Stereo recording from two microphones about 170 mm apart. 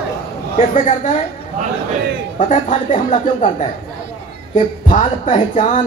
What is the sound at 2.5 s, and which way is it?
Speech, 45° left (ahead or behind).